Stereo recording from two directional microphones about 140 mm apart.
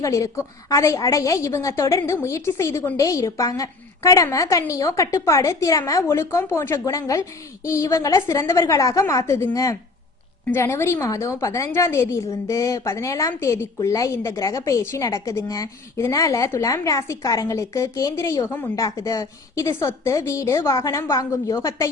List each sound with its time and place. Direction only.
0.0 s a woman's voice: 20° left (ahead or behind)